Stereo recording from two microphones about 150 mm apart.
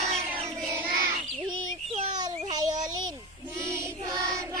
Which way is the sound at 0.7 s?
20° right (ahead or behind).